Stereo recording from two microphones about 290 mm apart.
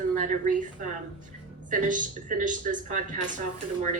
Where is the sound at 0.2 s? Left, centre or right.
Right.